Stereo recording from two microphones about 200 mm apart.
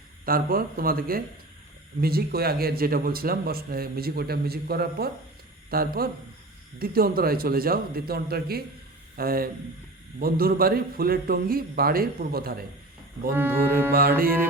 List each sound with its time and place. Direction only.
0.3 s speech: 45° right (ahead or behind)
13.3 s music: 10° right (ahead or behind)